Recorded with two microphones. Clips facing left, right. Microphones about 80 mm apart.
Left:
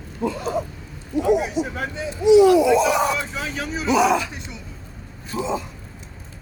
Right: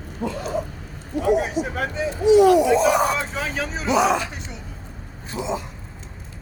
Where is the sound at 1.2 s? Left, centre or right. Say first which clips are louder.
Left 1 dB; right.